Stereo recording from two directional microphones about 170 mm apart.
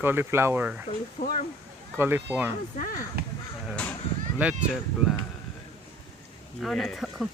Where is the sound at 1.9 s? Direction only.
15° right (ahead or behind).